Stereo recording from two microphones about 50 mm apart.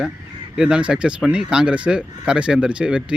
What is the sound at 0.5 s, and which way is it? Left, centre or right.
Speech, centre.